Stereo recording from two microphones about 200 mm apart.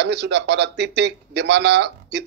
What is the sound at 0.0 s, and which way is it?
A man's voice, 60° right (ahead or behind).